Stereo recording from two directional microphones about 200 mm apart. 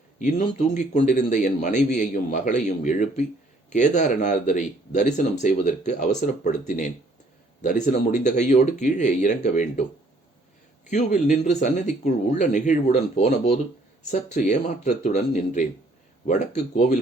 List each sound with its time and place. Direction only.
0.2 s speech: 40° left (ahead or behind)
10.8 s speech: 40° left (ahead or behind)